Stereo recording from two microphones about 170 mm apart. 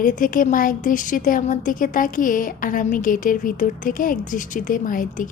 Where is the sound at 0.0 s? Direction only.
55° left (ahead or behind).